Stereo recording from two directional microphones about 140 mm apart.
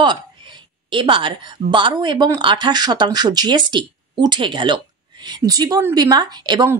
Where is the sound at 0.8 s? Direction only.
35° right (ahead or behind).